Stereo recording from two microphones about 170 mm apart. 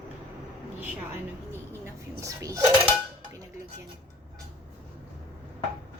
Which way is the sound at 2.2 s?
20° right (ahead or behind).